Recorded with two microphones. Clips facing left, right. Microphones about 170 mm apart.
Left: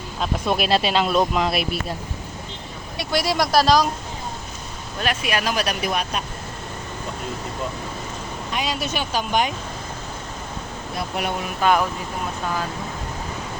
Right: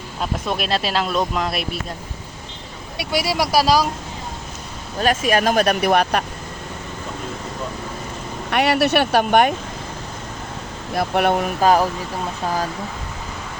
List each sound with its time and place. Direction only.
0.2 s speech: centre (ahead or behind)
3.0 s speech: 10° right (ahead or behind)
4.9 s speech: 40° right (ahead or behind); by 6.2 s 65° right (ahead or behind)
8.4 s speech: 65° right (ahead or behind)
10.9 s speech: 60° right (ahead or behind)
11.6 s speech: 35° right (ahead or behind)